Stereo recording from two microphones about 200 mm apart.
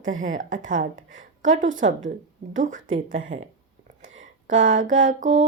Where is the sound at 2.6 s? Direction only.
40° right (ahead or behind).